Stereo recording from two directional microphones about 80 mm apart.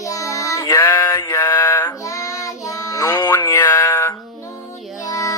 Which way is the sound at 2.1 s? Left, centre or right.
Left.